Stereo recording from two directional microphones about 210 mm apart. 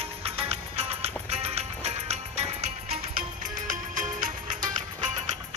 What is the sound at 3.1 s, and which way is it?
Music, 40° right (ahead or behind).